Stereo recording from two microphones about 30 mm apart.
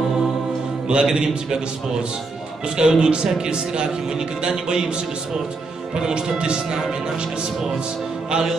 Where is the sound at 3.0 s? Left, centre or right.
Right.